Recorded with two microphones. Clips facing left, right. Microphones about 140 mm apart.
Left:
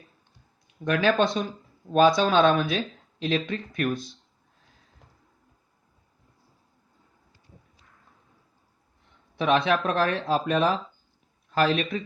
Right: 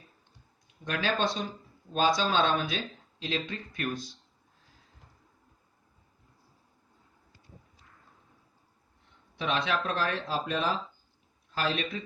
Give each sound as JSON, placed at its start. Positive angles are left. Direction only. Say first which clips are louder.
{"t": 0.9, "sound": "speech", "louder": "left 7 dB", "side_deg": 60}
{"t": 9.4, "sound": "speech", "louder": "left 7 dB", "side_deg": 60}